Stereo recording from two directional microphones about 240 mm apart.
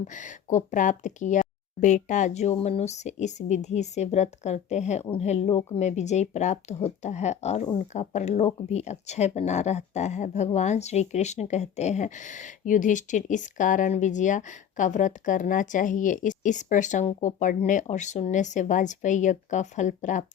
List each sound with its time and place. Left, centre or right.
0.0 s speech: left